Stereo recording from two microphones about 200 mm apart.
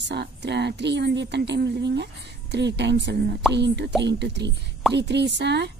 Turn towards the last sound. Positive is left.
turn(degrees=-60)  # may be behind; listen again after turning